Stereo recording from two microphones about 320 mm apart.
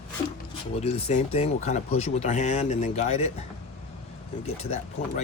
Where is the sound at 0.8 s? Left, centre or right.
Centre.